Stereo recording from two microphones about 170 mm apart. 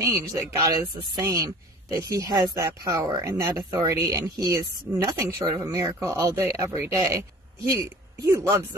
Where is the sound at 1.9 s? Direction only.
20° right (ahead or behind).